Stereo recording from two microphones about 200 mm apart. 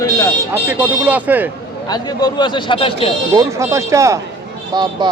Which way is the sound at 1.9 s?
20° left (ahead or behind).